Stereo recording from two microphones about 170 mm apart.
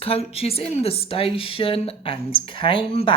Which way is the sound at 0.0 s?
35° left (ahead or behind).